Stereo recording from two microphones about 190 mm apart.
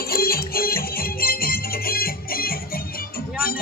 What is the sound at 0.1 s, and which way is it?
Music, 50° left (ahead or behind).